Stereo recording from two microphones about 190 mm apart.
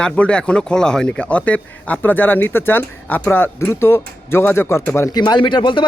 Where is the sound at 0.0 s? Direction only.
5° left (ahead or behind).